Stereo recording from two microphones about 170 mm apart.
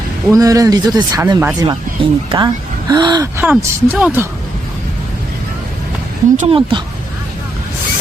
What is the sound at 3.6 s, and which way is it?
Speech, 10° right (ahead or behind).